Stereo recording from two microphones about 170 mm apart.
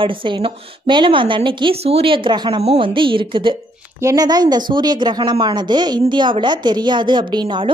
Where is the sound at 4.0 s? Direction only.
20° right (ahead or behind).